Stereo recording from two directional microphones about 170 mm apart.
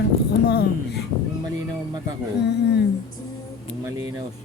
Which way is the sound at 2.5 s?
85° left.